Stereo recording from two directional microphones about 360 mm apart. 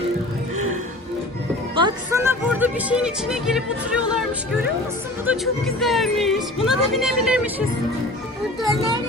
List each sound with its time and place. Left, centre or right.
1.7 s music: centre
5.2 s speech: centre